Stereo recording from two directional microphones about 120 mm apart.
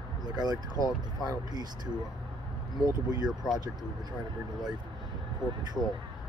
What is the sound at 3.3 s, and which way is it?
Speech, 5° right (ahead or behind).